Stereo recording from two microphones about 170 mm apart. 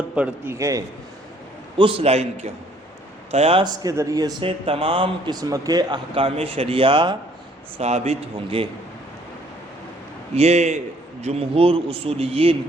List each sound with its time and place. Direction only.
0.2 s a man's voice: 15° right (ahead or behind)
1.8 s a man's voice: 35° right (ahead or behind)
3.8 s speech: 20° right (ahead or behind)
7.8 s a man's voice: 40° right (ahead or behind)
10.3 s a man's voice: 40° right (ahead or behind)